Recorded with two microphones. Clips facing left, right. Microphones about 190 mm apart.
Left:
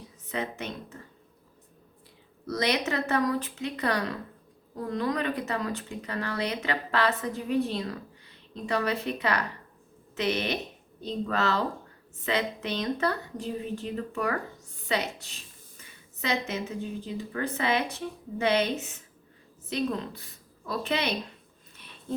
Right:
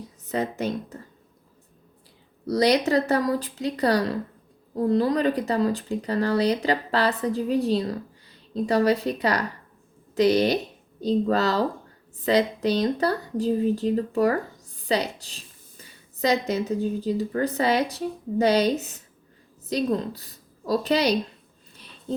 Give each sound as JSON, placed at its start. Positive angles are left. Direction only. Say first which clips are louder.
{"t": 0.3, "sound": "speech", "louder": "right 7 dB", "side_deg": -40}
{"t": 2.5, "sound": "a woman's voice", "louder": "right 8 dB", "side_deg": -35}